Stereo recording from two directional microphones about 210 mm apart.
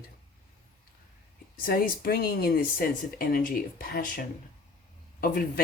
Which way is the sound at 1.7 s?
45° left (ahead or behind).